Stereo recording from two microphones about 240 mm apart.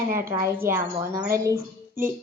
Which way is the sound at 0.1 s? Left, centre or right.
Centre.